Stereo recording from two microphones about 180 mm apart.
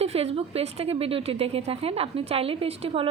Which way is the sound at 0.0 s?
35° right (ahead or behind).